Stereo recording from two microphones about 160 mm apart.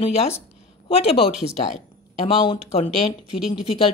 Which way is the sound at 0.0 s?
40° left (ahead or behind).